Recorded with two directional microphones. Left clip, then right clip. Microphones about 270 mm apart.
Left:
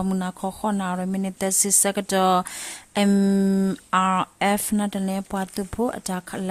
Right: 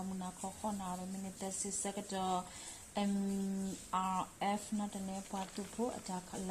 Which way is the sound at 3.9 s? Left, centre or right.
Left.